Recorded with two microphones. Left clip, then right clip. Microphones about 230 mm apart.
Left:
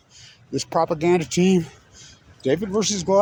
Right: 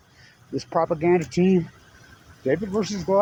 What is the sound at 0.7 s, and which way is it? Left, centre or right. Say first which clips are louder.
Speech: left 1 dB; left.